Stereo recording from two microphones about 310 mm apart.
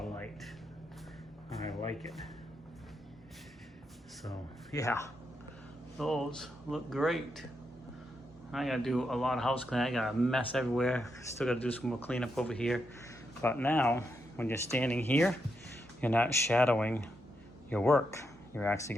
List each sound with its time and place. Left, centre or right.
0.0 s music: centre
4.7 s speech: centre
6.0 s speech: centre
8.5 s speech: centre